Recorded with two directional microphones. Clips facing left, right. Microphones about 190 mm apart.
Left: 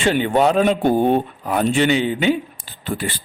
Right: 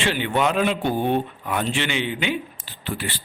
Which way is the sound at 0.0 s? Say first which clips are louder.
Left 6 dB; 45° left (ahead or behind).